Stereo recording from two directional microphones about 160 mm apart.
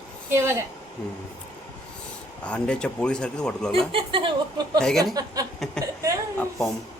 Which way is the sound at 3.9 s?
35° right (ahead or behind).